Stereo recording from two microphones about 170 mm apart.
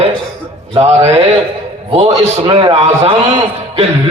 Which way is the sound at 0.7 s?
35° right (ahead or behind).